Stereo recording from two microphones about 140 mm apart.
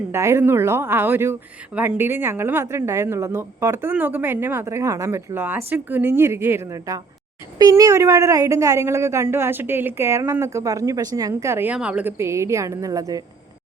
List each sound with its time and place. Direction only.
0.1 s a woman's voice: 20° right (ahead or behind)